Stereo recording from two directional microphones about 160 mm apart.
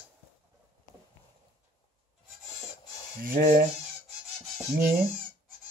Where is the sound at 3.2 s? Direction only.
60° right (ahead or behind).